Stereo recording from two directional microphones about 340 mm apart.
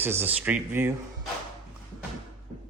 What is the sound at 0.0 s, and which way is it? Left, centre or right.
Speech, centre.